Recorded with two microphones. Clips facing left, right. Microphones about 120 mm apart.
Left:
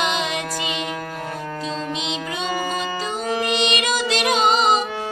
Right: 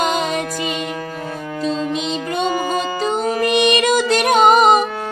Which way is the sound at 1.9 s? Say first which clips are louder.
Right 5 dB; 50° right (ahead or behind).